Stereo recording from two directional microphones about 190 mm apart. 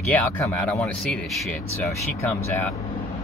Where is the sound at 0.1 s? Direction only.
10° left (ahead or behind).